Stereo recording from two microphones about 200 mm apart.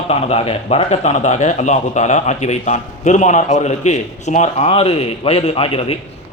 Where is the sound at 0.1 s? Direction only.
30° left (ahead or behind).